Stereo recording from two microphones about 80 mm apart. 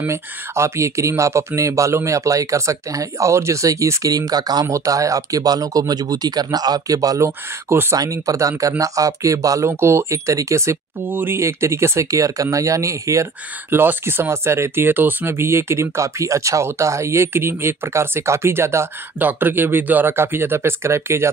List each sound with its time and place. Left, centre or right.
0.0 s speech: right
7.2 s speech: right
8.0 s speech: right
9.7 s speech: right
13.7 s speech: right
19.1 s speech: right